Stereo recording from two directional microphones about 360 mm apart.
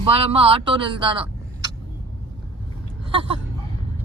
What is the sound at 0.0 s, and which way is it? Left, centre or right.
Speech, centre.